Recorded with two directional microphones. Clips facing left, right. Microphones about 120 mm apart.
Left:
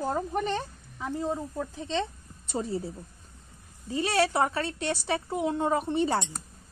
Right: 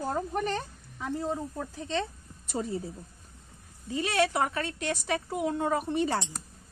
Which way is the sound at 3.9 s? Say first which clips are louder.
Left 2 dB; 30° left (ahead or behind).